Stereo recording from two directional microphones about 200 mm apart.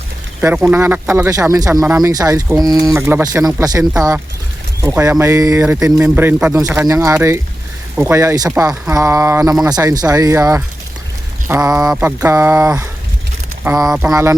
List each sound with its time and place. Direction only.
0.4 s speech: 10° right (ahead or behind)
14.1 s speech: 15° right (ahead or behind)